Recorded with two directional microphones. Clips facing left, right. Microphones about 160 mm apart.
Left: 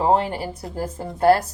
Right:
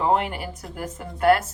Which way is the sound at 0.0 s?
35° left (ahead or behind).